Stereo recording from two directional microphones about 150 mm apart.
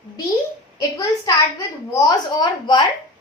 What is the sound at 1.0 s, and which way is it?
A woman's voice, 20° left (ahead or behind).